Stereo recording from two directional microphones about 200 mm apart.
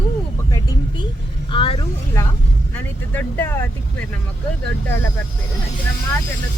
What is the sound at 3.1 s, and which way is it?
Speech, 10° left (ahead or behind).